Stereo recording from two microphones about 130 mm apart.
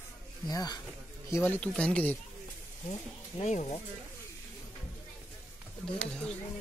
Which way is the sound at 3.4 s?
65° left (ahead or behind).